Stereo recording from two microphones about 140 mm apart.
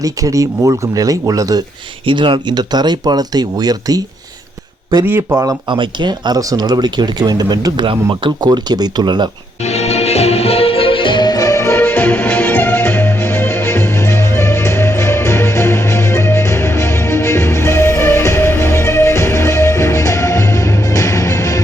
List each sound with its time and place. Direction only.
0.0 s speech: 25° right (ahead or behind)
2.0 s speech: 35° right (ahead or behind)
5.3 s speech: 25° right (ahead or behind)
9.6 s music: 50° left (ahead or behind); by 21.6 s 25° left (ahead or behind)